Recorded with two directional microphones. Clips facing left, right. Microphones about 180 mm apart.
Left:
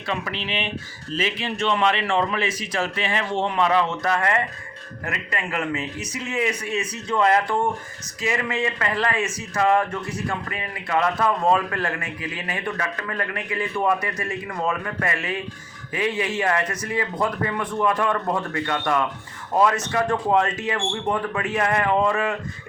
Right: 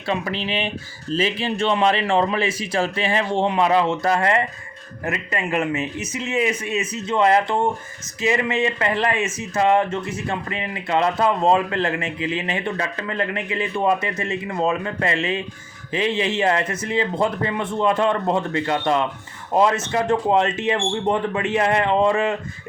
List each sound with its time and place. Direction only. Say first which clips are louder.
0.1 s speech: right 4 dB; 35° right (ahead or behind)